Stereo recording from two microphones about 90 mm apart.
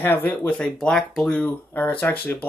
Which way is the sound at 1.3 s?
15° left (ahead or behind).